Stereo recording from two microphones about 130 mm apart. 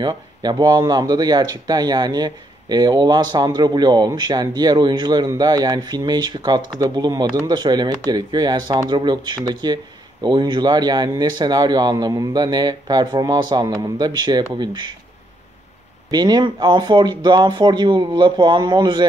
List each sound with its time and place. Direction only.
0.0 s speech: 35° right (ahead or behind)
16.1 s speech: 30° right (ahead or behind)